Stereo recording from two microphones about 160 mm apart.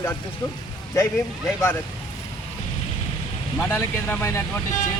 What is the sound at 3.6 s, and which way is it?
Speech, 15° left (ahead or behind).